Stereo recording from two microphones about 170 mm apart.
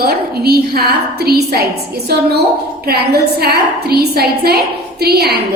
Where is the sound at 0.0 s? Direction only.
65° right (ahead or behind).